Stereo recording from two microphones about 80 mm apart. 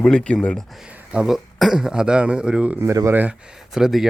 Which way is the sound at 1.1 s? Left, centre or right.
Centre.